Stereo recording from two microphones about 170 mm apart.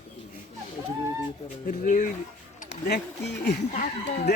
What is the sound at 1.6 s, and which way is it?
Speech, 50° left (ahead or behind).